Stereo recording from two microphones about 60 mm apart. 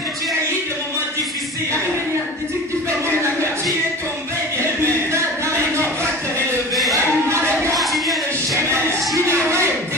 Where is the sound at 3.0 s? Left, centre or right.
Right.